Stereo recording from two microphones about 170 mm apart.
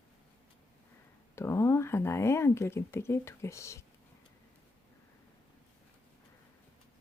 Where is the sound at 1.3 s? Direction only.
15° left (ahead or behind).